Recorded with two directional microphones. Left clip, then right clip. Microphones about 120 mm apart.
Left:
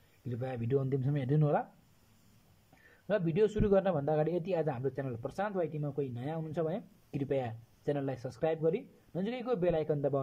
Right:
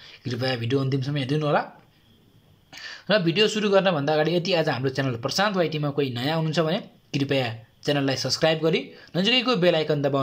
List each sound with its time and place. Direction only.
0.3 s a man's voice: 55° left (ahead or behind)
0.8 s speech: 90° left; by 1.6 s 75° left (ahead or behind)
3.1 s a man's voice: 55° left (ahead or behind)
8.2 s speech: 45° left (ahead or behind)